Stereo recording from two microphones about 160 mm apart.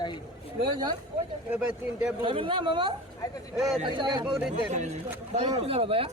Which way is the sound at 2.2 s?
30° right (ahead or behind).